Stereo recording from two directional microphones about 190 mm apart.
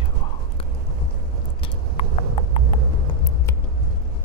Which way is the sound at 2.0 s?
30° left (ahead or behind).